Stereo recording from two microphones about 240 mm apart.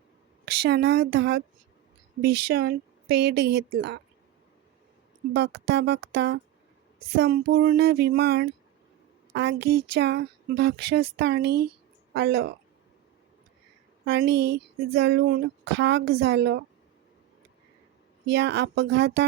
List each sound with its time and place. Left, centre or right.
0.4 s speech: right
5.3 s speech: right
14.0 s speech: right
18.3 s speech: right